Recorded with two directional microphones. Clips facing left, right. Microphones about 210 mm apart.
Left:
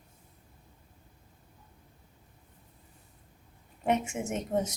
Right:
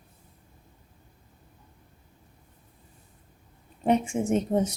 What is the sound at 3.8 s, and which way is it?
Speech, 30° right (ahead or behind).